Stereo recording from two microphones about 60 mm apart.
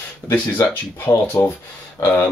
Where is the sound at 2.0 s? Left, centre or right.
Left.